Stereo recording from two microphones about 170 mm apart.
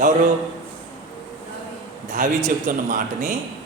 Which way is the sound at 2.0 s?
50° right (ahead or behind).